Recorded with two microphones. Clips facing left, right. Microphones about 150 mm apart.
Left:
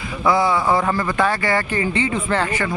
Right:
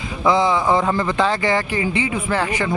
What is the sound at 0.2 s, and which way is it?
Speech, 20° right (ahead or behind).